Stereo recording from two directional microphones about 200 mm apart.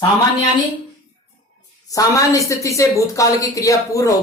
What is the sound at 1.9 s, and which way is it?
A woman's voice, 15° left (ahead or behind).